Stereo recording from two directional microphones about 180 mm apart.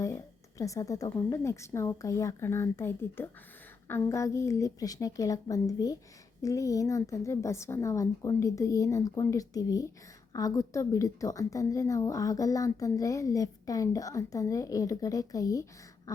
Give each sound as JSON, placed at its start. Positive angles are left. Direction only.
{"t": 0.6, "sound": "a woman's voice", "side_deg": 15}